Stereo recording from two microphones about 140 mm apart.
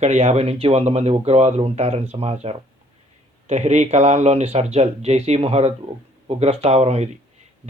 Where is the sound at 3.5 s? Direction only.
55° right (ahead or behind).